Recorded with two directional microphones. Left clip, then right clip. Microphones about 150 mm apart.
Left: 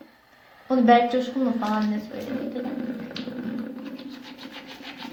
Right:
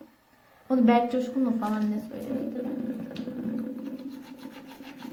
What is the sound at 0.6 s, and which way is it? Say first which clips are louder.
Speech: left 5 dB; 20° right (ahead or behind).